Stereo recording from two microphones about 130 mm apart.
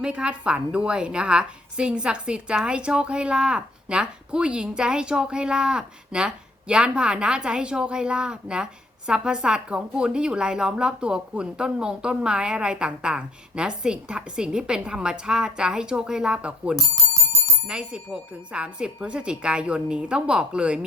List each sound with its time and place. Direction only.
0.0 s a woman's voice: 5° right (ahead or behind)
16.7 s bicycle bell: 30° left (ahead or behind)
17.7 s a woman's voice: 5° right (ahead or behind)